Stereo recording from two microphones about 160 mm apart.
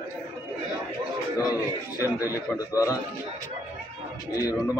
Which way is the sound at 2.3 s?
20° left (ahead or behind).